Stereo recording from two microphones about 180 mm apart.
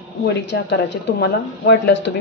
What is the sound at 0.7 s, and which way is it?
Speech, 70° left (ahead or behind).